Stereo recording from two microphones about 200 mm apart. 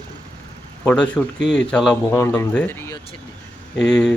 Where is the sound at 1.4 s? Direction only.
65° left (ahead or behind).